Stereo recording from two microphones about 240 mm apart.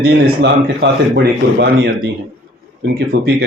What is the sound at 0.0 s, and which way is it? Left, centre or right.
Speech, right.